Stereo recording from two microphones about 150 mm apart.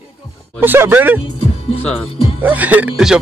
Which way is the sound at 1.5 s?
40° left (ahead or behind).